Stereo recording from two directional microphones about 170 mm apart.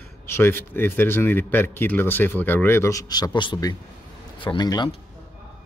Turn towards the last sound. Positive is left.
turn(degrees=25)  # may be behind; listen again after turning